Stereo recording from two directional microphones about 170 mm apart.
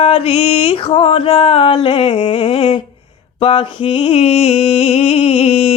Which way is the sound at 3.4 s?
30° left (ahead or behind).